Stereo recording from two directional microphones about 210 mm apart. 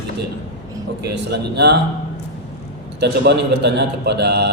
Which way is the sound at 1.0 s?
50° right (ahead or behind).